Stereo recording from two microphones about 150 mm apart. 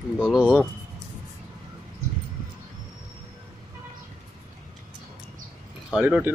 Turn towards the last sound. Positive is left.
turn(degrees=-10)  # may be behind; listen again after turning